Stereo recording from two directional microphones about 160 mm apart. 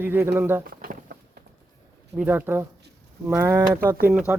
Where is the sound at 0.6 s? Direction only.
65° right (ahead or behind).